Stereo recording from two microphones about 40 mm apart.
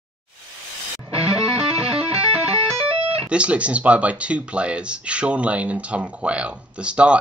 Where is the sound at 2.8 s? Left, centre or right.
Right.